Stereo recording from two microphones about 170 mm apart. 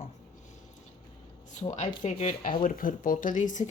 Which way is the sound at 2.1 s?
45° left (ahead or behind).